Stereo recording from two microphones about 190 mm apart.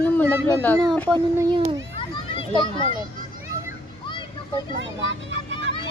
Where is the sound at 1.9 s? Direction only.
25° left (ahead or behind).